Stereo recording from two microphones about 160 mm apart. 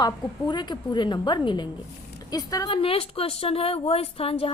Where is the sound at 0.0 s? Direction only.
30° left (ahead or behind).